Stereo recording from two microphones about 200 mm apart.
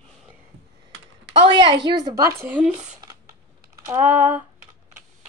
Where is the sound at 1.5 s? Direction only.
25° right (ahead or behind).